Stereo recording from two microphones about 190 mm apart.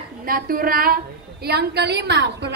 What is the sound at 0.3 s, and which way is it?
A woman's voice, 50° right (ahead or behind).